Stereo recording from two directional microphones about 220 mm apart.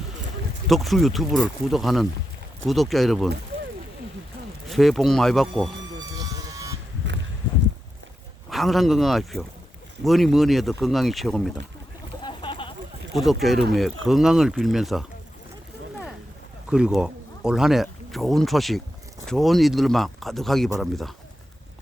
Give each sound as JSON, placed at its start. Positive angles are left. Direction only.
{"t": 0.7, "sound": "speech", "side_deg": 0}
{"t": 4.7, "sound": "speech", "side_deg": 0}
{"t": 6.0, "sound": "vehicle", "side_deg": -15}
{"t": 8.4, "sound": "speech", "side_deg": 0}
{"t": 12.2, "sound": "a sound", "side_deg": 20}
{"t": 13.1, "sound": "speech", "side_deg": 0}
{"t": 16.6, "sound": "speech", "side_deg": -5}